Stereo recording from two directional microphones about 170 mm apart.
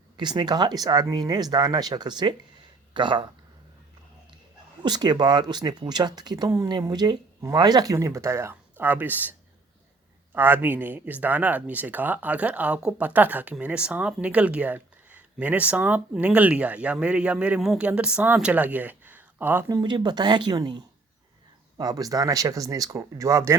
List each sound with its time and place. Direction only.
0.2 s speech: 25° right (ahead or behind)
4.8 s speech: 25° right (ahead or behind)
10.3 s speech: 10° right (ahead or behind)
19.6 s speech: 25° right (ahead or behind)